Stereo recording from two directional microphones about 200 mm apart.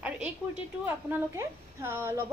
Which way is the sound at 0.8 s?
10° right (ahead or behind).